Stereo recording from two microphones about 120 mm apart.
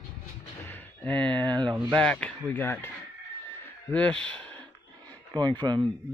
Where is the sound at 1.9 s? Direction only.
10° left (ahead or behind).